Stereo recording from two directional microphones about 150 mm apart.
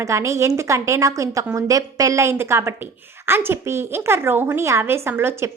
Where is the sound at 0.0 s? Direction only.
20° right (ahead or behind).